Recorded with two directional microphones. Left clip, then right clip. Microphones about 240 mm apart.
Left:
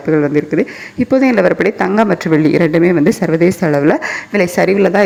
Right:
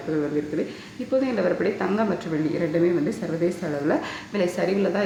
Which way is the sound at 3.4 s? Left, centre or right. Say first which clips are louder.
Left 12 dB; left.